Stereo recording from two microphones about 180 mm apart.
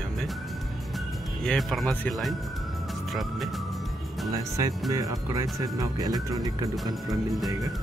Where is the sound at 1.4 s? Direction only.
Centre (ahead or behind).